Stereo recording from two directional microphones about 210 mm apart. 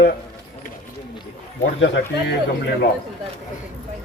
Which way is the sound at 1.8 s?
60° left (ahead or behind).